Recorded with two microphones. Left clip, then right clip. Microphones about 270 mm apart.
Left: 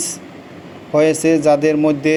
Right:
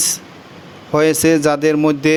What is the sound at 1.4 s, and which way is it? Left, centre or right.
Speech, right.